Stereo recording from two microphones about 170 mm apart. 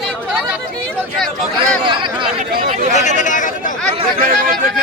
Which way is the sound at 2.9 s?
45° left (ahead or behind).